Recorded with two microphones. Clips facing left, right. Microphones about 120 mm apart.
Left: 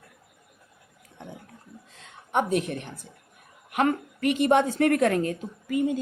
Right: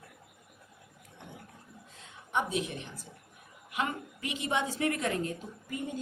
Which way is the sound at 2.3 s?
60° left (ahead or behind).